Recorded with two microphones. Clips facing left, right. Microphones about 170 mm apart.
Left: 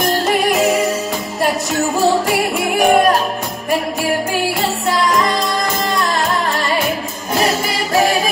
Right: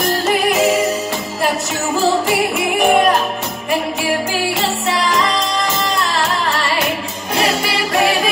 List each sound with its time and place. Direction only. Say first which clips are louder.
0.0 s music: left 1 dB; centre (ahead or behind)
2.0 s music: right 1 dB; centre (ahead or behind)
7.6 s singing: left 1 dB; 40° left (ahead or behind)